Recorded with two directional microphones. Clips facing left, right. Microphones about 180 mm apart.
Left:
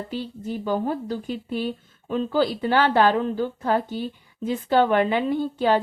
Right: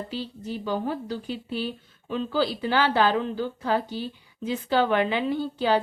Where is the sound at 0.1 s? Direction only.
50° left (ahead or behind).